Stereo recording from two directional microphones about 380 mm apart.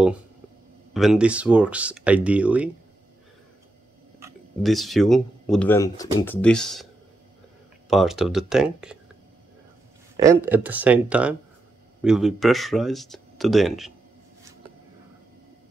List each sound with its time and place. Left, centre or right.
0.9 s speech: centre
4.2 s speech: centre
7.9 s speech: centre
10.1 s speech: centre